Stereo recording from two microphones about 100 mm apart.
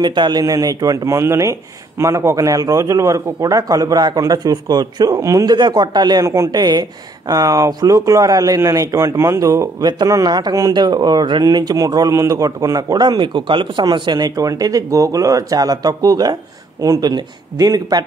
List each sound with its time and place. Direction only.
0.0 s speech: 50° right (ahead or behind)
6.2 s speech: 30° right (ahead or behind)
6.5 s speech: 45° right (ahead or behind)
11.4 s speech: 40° right (ahead or behind)